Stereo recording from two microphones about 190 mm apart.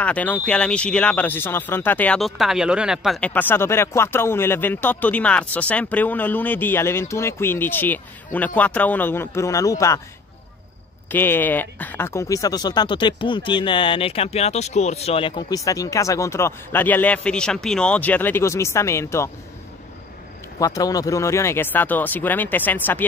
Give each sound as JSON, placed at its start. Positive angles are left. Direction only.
{"t": 0.0, "sound": "speech", "side_deg": 10}
{"t": 11.1, "sound": "speech", "side_deg": 10}
{"t": 20.5, "sound": "speech", "side_deg": 20}